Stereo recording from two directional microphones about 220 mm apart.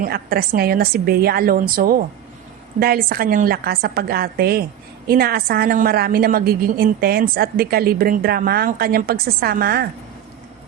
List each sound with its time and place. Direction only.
0.0 s a woman's voice: 45° right (ahead or behind)